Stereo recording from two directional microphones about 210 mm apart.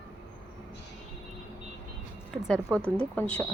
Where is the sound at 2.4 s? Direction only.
Centre (ahead or behind).